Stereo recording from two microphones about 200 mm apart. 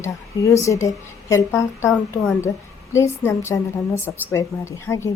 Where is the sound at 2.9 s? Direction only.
15° left (ahead or behind).